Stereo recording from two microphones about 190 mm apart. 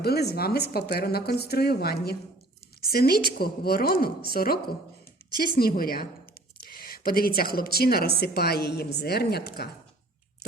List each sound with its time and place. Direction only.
0.0 s a woman's voice: 55° left (ahead or behind)